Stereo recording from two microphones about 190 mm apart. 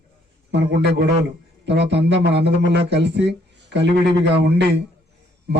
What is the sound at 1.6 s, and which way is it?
Speech, 65° right (ahead or behind).